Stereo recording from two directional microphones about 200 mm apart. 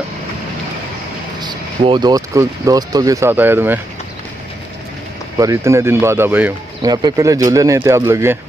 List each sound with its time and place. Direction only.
1.4 s speech: 20° right (ahead or behind)
5.4 s speech: 15° right (ahead or behind)
6.9 s speech: 20° right (ahead or behind)